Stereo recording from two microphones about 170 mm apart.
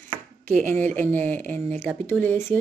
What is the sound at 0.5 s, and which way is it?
Speech, 5° left (ahead or behind).